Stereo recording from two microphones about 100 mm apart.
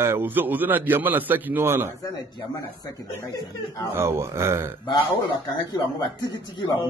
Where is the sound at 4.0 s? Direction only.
25° right (ahead or behind).